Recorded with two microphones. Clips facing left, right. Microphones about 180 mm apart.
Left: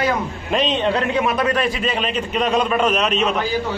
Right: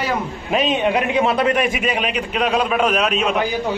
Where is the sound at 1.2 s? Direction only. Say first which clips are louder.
Right 2 dB; 30° right (ahead or behind).